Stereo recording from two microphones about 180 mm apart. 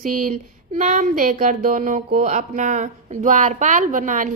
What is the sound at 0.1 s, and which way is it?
Speech, 45° right (ahead or behind).